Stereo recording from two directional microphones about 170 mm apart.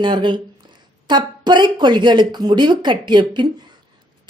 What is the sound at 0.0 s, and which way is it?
Speech, 30° right (ahead or behind).